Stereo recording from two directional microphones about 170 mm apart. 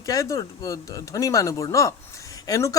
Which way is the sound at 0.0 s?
20° left (ahead or behind).